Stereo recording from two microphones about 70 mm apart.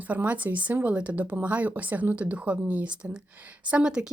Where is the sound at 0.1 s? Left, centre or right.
Right.